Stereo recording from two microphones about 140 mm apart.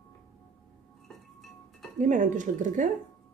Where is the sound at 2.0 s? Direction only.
65° right (ahead or behind).